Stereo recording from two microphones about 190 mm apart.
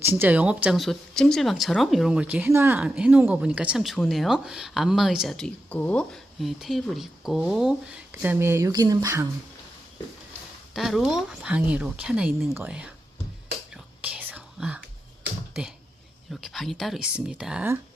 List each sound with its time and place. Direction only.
0.0 s speech: 10° right (ahead or behind)
10.8 s speech: centre (ahead or behind)
13.7 s whispering: 5° right (ahead or behind)
16.3 s speech: centre (ahead or behind)